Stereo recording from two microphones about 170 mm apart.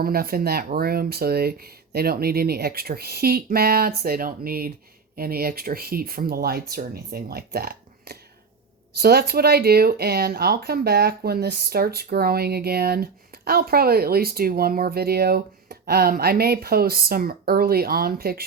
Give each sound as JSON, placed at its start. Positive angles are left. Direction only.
{"t": 0.0, "sound": "speech", "side_deg": -60}